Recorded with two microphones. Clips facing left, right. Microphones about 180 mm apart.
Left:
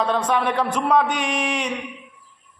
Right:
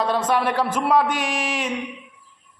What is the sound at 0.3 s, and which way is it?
A man's voice, 5° right (ahead or behind).